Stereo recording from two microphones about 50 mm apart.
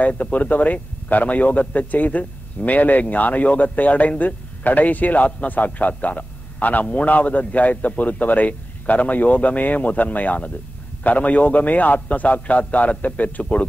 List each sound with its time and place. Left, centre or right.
0.0 s a man's voice: left